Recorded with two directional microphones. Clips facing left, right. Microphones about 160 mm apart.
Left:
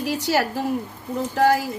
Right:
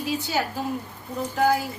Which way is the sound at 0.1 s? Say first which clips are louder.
Left 4 dB; 85° left.